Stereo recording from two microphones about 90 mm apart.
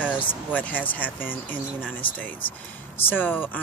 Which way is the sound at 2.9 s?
20° left (ahead or behind).